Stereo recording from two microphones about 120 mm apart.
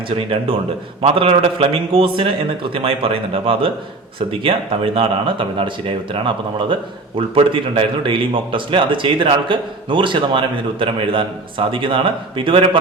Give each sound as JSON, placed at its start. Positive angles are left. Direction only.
{"t": 1.0, "sound": "a man's voice", "side_deg": -55}